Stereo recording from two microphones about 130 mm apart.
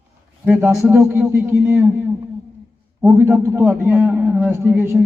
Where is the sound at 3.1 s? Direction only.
20° right (ahead or behind).